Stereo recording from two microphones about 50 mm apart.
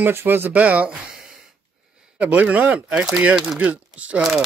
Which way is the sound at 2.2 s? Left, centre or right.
Right.